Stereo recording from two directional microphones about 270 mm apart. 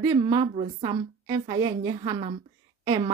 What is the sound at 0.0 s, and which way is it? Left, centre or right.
A woman's voice, centre.